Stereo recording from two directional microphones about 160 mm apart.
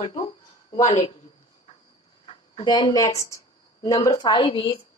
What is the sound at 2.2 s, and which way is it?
A woman's voice, 35° left (ahead or behind).